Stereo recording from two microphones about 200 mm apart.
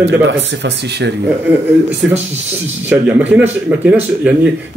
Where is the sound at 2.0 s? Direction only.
5° right (ahead or behind).